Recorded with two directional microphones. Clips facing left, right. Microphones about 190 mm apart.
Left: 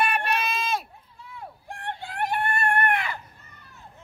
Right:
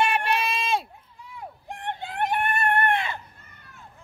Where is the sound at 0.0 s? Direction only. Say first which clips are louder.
Right 2 dB; 25° right (ahead or behind).